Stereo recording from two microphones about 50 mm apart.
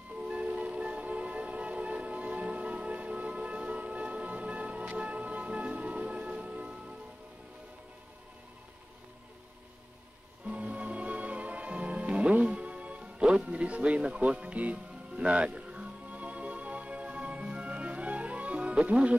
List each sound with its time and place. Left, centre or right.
0.2 s music: right
10.4 s music: right